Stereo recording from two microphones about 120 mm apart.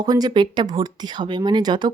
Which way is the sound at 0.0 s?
35° right (ahead or behind).